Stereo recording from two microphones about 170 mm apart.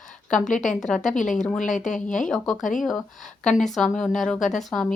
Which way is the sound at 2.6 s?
50° left (ahead or behind).